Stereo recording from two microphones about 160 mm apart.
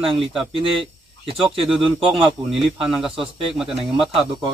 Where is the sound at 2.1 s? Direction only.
Centre (ahead or behind).